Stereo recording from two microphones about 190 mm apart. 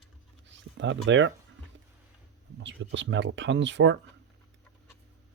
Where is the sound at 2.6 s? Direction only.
75° right (ahead or behind).